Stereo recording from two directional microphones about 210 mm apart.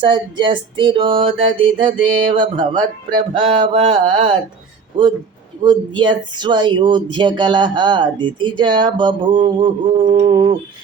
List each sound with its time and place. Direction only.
0.0 s speech: 25° right (ahead or behind)